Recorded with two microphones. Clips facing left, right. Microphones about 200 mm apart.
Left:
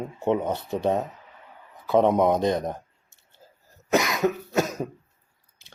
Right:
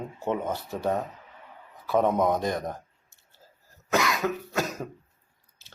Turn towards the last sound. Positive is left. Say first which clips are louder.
# left 5 dB
turn(degrees=20)  # may be behind; listen again after turning